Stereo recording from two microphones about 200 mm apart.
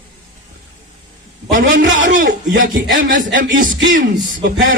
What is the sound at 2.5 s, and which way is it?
Speech, 45° right (ahead or behind).